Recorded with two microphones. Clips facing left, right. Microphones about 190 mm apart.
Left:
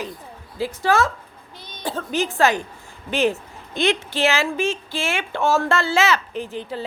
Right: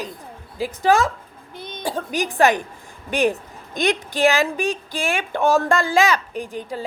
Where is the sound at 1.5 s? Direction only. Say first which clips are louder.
Right 8 dB; 55° right (ahead or behind).